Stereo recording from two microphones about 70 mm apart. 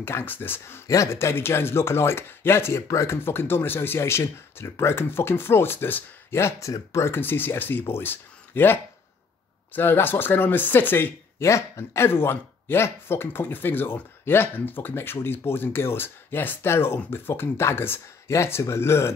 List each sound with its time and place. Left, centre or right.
0.0 s speech: left
0.8 s speech: left
6.3 s speech: left
7.2 s speech: left